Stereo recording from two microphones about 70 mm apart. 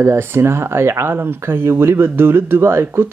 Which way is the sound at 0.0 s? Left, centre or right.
Right.